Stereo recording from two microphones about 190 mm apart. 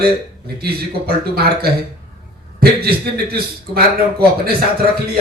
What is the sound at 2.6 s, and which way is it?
A man's voice, 55° right (ahead or behind).